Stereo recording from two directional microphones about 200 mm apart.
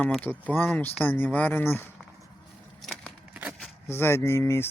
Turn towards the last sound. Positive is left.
turn(degrees=15)  # may be behind; listen again after turning